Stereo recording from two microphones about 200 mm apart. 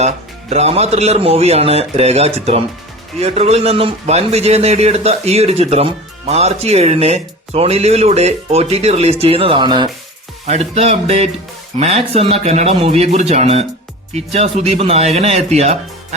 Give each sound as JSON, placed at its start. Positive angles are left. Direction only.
{"t": 0.5, "sound": "a man's voice", "side_deg": -30}
{"t": 10.4, "sound": "a man's voice", "side_deg": -30}